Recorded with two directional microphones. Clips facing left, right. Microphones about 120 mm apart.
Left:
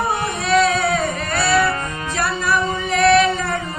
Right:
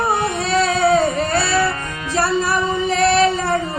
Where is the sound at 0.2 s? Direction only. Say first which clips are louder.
Left 1 dB; 30° right (ahead or behind).